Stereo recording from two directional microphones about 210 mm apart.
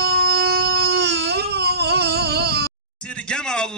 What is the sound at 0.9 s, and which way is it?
Baby cry, 55° right (ahead or behind).